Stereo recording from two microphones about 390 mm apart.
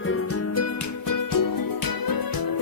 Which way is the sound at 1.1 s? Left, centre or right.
Left.